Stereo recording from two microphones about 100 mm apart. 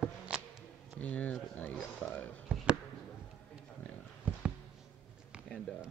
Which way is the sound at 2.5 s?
10° right (ahead or behind).